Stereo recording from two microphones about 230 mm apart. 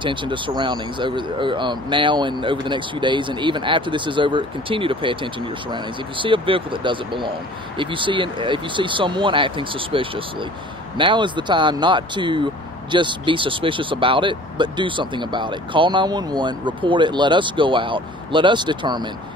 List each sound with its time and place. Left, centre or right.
0.0 s speech: right